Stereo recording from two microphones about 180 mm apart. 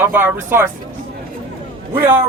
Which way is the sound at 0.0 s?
10° right (ahead or behind).